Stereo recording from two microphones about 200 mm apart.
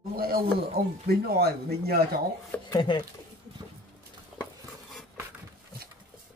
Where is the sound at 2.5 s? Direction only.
5° left (ahead or behind).